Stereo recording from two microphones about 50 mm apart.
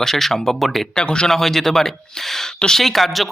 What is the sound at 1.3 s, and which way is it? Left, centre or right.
Speech, centre.